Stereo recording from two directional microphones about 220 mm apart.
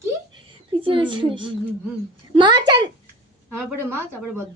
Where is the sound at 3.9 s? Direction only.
10° right (ahead or behind).